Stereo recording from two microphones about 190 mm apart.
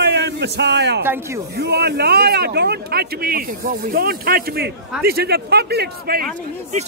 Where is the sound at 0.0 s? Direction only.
60° right (ahead or behind).